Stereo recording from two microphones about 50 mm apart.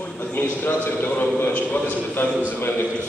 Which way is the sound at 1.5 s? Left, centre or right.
Left.